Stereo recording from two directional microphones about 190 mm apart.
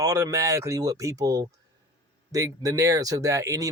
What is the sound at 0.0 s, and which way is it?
Speech, 20° right (ahead or behind).